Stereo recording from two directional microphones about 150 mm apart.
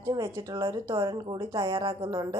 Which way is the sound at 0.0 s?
20° right (ahead or behind).